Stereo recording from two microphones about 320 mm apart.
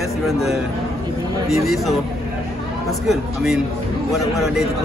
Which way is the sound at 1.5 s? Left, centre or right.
Centre.